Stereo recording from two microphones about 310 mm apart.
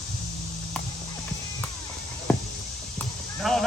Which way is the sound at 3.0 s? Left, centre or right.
Centre.